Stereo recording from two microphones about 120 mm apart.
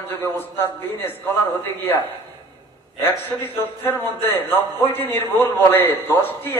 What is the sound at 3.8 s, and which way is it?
A man's voice, 15° left (ahead or behind).